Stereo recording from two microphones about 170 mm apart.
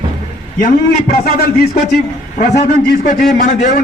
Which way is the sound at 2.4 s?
55° left (ahead or behind).